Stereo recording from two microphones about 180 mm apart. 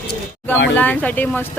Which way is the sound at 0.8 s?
10° left (ahead or behind).